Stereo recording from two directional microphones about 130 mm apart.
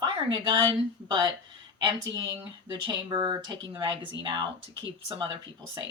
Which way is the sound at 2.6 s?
35° right (ahead or behind).